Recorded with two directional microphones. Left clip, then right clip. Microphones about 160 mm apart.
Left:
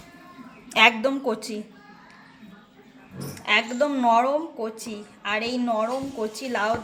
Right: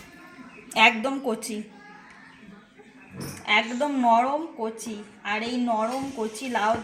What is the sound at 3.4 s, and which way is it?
Speech, centre (ahead or behind).